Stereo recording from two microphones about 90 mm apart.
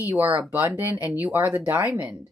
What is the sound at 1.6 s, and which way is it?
Speech, 30° right (ahead or behind).